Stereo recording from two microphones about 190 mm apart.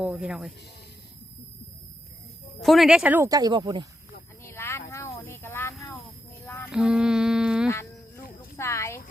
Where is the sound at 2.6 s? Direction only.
Centre (ahead or behind); by 3.9 s 20° right (ahead or behind).